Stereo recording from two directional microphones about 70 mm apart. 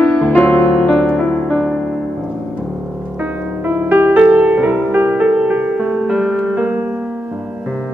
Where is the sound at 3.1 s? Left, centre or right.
Right.